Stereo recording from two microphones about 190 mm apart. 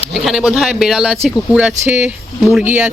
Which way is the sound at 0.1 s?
Centre (ahead or behind).